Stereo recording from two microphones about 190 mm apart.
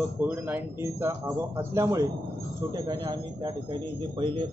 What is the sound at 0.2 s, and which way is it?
A man's voice, 10° right (ahead or behind).